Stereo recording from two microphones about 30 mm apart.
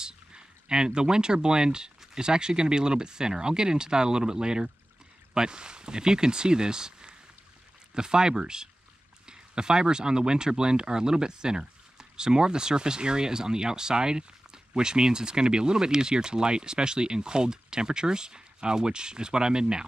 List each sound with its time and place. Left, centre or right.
0.0 s speech: right